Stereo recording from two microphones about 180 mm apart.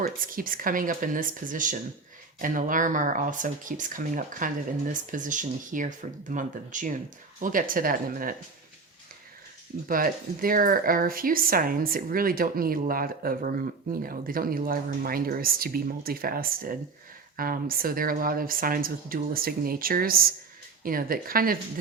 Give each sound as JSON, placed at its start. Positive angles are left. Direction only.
{"t": 0.0, "sound": "speech", "side_deg": -50}
{"t": 9.9, "sound": "speech", "side_deg": -50}